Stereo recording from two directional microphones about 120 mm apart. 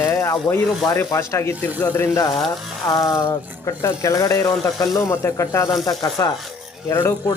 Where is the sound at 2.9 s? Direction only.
30° left (ahead or behind).